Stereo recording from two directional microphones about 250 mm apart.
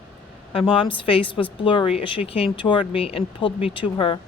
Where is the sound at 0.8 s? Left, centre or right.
Left.